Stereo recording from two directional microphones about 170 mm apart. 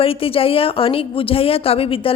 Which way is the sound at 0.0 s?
35° left (ahead or behind).